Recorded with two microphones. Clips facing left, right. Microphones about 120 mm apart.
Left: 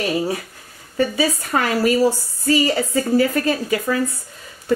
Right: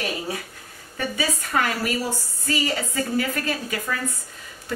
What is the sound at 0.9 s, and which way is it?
A woman's voice, 35° left (ahead or behind).